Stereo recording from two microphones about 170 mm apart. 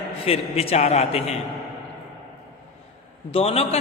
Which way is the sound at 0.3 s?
35° left (ahead or behind).